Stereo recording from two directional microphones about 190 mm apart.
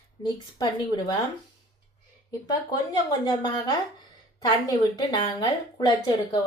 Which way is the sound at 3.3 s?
20° left (ahead or behind).